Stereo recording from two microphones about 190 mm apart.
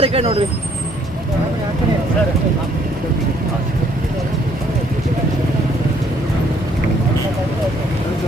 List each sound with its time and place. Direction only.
0.0 s speech: 30° right (ahead or behind)